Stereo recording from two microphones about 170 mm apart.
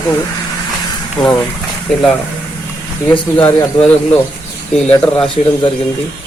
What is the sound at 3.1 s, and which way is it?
Speech, 10° left (ahead or behind).